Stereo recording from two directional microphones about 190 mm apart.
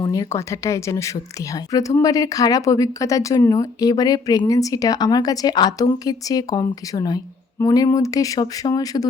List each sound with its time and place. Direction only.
0.0 s speech: 20° left (ahead or behind)